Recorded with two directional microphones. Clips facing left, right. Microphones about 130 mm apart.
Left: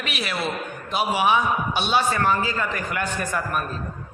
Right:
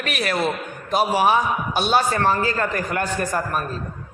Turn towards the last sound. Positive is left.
turn(degrees=-40)  # may be behind; listen again after turning